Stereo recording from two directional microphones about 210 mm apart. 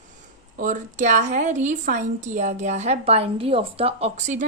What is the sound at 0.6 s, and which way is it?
Speech, 35° right (ahead or behind).